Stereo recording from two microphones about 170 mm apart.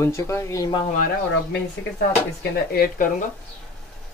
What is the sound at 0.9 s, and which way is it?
Speech, 60° left (ahead or behind).